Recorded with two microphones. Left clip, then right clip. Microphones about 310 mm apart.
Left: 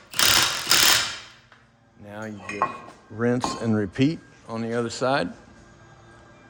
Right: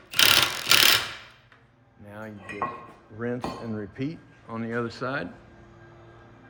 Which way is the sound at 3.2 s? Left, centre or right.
Left.